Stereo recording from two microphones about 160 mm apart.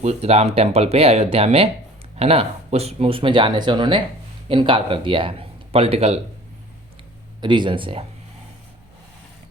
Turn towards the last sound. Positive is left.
turn(degrees=-30)  # may be behind; listen again after turning